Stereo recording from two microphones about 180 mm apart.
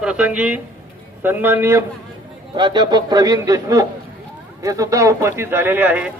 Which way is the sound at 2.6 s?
25° right (ahead or behind).